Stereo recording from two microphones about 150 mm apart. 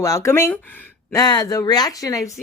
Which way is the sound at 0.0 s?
20° left (ahead or behind).